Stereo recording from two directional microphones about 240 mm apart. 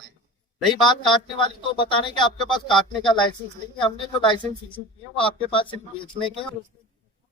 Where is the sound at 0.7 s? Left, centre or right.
Centre.